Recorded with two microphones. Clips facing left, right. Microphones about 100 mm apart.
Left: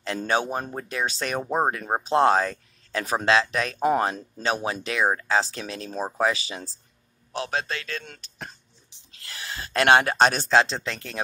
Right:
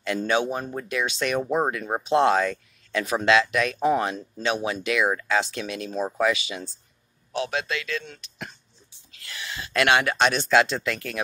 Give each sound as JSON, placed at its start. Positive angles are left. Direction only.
{"t": 0.2, "sound": "speech", "side_deg": 40}
{"t": 8.2, "sound": "throat clearing", "side_deg": 35}